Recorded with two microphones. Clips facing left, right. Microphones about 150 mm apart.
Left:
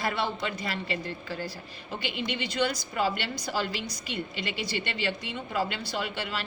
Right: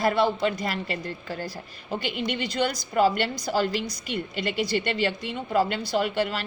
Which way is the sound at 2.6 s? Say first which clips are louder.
Right 6 dB; 45° right (ahead or behind).